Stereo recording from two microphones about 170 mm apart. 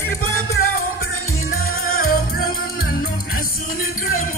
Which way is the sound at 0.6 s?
60° left (ahead or behind).